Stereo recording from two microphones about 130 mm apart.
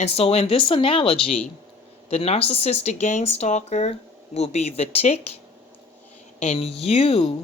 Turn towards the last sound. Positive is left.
turn(degrees=45)  # may be behind; listen again after turning